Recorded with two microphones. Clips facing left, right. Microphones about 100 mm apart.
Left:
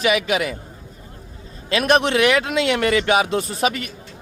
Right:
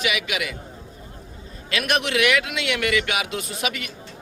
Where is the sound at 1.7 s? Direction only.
35° left (ahead or behind).